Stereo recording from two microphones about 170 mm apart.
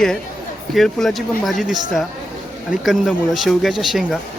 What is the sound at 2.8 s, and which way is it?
Speech, centre (ahead or behind).